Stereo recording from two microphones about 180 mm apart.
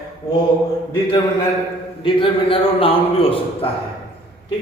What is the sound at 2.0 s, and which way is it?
A man's voice, 30° left (ahead or behind).